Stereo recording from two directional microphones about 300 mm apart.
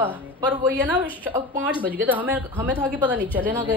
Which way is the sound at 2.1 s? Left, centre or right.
Centre.